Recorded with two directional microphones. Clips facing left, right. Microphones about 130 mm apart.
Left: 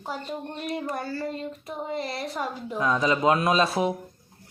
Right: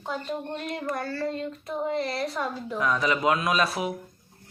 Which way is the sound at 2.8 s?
25° left (ahead or behind).